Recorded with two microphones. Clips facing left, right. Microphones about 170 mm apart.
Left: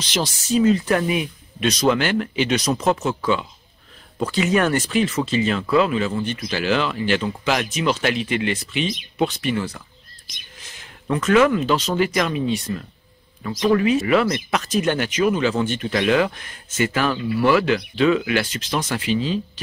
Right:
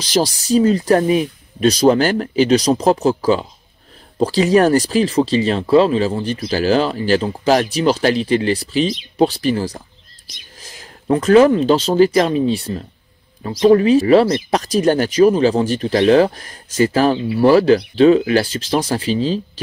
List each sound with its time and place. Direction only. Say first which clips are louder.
0.0 s speech: right 7 dB; 35° right (ahead or behind)